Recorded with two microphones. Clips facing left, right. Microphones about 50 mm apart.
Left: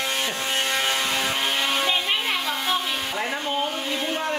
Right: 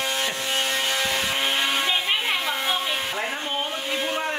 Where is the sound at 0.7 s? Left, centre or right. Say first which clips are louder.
Left 1 dB; left.